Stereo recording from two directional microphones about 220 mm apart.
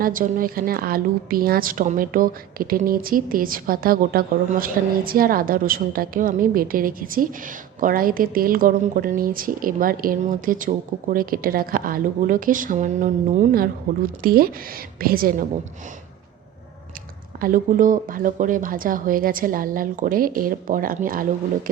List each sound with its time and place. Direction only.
0.0 s a woman's voice: 40° right (ahead or behind)
17.4 s a woman's voice: 40° right (ahead or behind)